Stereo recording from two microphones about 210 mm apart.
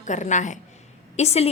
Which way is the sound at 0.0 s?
35° left (ahead or behind).